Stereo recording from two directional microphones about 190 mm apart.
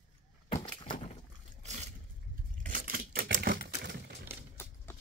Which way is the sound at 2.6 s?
50° right (ahead or behind).